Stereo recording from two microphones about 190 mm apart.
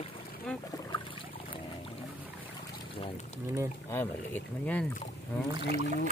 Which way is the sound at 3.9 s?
10° left (ahead or behind).